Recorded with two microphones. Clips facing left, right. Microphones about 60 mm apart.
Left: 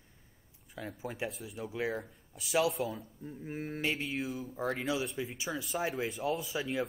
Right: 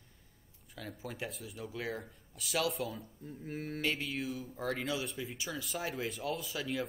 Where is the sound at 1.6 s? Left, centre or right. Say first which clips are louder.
Left 5 dB; centre.